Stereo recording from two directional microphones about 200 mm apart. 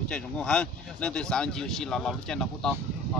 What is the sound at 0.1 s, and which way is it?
Speech, 5° left (ahead or behind).